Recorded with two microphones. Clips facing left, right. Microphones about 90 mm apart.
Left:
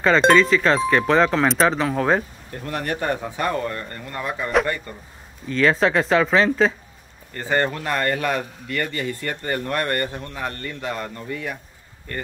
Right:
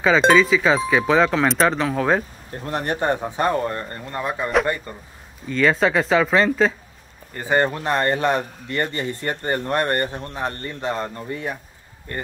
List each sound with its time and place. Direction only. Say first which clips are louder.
0.0 s speech: even; centre (ahead or behind)
2.5 s a man's voice: right 2 dB; 30° right (ahead or behind)
5.5 s speech: even; centre (ahead or behind)
7.3 s a man's voice: right 2 dB; 15° right (ahead or behind)